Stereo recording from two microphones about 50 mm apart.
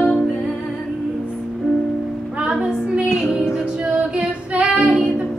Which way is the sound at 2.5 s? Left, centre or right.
Centre.